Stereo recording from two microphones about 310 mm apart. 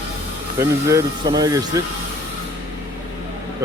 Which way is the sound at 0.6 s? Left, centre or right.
Centre.